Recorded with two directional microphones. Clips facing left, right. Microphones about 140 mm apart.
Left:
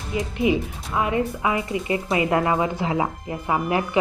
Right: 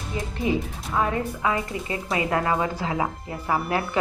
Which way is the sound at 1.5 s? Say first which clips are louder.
Left 3 dB; 20° left (ahead or behind).